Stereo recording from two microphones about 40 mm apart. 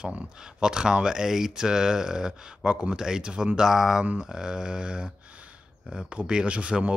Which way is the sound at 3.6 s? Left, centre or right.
Centre.